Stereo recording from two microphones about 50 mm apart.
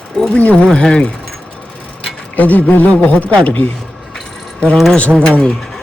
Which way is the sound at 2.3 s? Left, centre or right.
Left.